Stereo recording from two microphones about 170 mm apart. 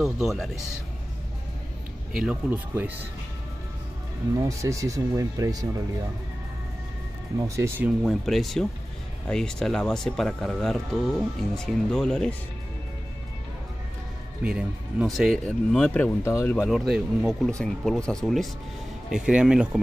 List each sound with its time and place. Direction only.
0.0 s speech: centre (ahead or behind)
2.1 s speech: 5° right (ahead or behind)
4.4 s speech: 20° right (ahead or behind)
7.4 s speech: 15° right (ahead or behind)
8.0 s speech: centre (ahead or behind)
14.4 s speech: 5° right (ahead or behind); by 16.6 s 15° left (ahead or behind)
16.6 s speech: 5° right (ahead or behind)